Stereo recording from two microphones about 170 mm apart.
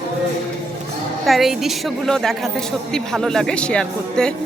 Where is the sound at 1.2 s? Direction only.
Centre (ahead or behind).